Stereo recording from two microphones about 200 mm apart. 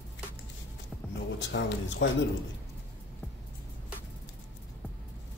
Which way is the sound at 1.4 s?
60° left (ahead or behind).